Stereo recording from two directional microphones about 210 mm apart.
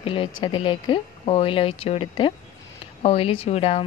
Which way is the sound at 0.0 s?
25° left (ahead or behind).